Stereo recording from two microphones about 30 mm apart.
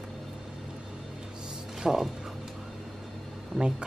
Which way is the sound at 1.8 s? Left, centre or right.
Centre.